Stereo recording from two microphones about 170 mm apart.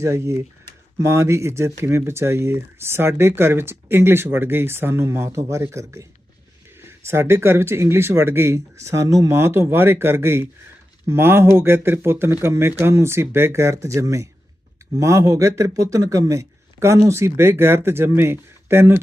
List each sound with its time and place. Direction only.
0.0 s speech: 15° right (ahead or behind)